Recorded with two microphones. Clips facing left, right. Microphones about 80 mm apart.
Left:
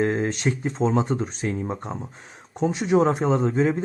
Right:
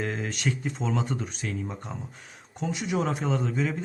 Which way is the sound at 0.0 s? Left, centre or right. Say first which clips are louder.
Left 7 dB; left.